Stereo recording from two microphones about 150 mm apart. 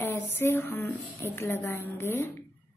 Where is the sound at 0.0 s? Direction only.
15° left (ahead or behind).